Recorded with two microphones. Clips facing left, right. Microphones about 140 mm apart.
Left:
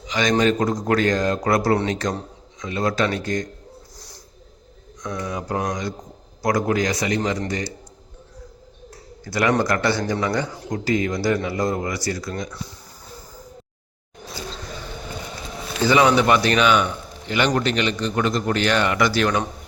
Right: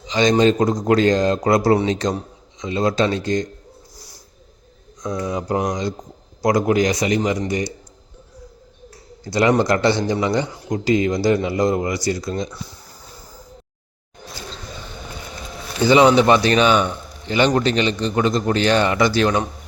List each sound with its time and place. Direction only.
0.0 s a man's voice: 25° right (ahead or behind)
3.9 s snort: 10° right (ahead or behind)
5.0 s a man's voice: 20° right (ahead or behind)
9.2 s a man's voice: 25° right (ahead or behind)
15.8 s a man's voice: 20° right (ahead or behind)